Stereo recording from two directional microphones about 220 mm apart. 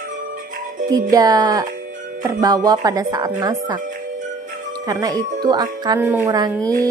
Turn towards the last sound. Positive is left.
turn(degrees=-15)  # may be behind; listen again after turning